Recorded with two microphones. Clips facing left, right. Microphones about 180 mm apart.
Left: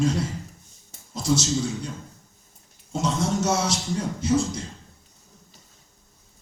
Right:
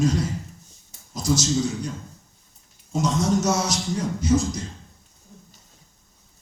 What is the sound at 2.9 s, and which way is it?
Speech, 30° left (ahead or behind).